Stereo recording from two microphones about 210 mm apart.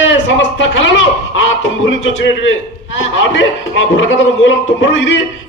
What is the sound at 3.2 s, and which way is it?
A man's voice, 65° left (ahead or behind).